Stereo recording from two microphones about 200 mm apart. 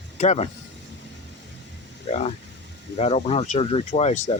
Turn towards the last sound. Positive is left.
turn(degrees=35)  # may be behind; listen again after turning